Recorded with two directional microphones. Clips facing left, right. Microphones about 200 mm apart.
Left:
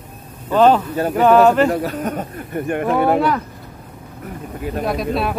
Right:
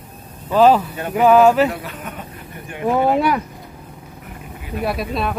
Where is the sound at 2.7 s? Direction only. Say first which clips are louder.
Left 1 dB; 60° left (ahead or behind).